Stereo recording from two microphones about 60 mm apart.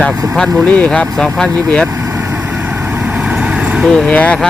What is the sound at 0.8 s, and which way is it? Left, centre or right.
Speech, centre.